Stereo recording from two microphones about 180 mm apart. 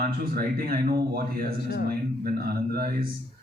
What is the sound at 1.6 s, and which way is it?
Speech, 65° left (ahead or behind).